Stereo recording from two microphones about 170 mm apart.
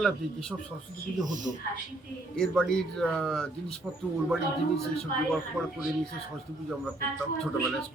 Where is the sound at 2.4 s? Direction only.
5° left (ahead or behind).